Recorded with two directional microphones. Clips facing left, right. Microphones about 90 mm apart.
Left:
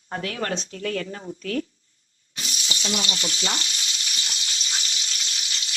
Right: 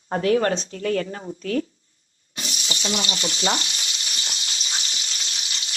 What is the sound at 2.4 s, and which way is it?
Frying, 30° right (ahead or behind).